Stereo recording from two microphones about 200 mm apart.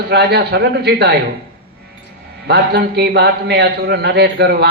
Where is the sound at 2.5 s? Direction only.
55° right (ahead or behind).